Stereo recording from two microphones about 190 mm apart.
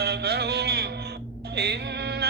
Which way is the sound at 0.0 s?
60° right (ahead or behind).